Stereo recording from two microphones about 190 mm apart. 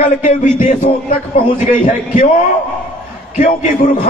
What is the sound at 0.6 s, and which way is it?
Music, 45° left (ahead or behind).